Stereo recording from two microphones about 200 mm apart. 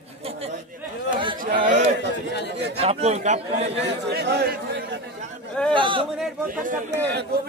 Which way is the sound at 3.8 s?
55° right (ahead or behind).